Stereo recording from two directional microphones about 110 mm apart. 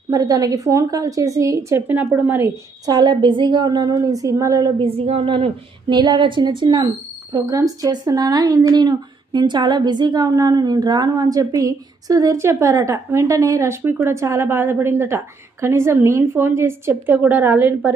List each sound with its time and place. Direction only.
0.1 s a woman's voice: 35° right (ahead or behind); by 2.5 s 15° right (ahead or behind)
2.8 s speech: 40° right (ahead or behind)
4.8 s a woman's voice: 60° right (ahead or behind)
5.9 s speech: 40° right (ahead or behind)
7.3 s a woman's voice: 30° right (ahead or behind)